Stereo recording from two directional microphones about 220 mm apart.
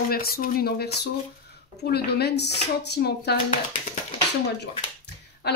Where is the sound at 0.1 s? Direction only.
45° left (ahead or behind).